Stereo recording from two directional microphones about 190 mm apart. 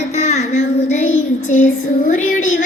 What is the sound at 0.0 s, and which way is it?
Child singing, 40° left (ahead or behind).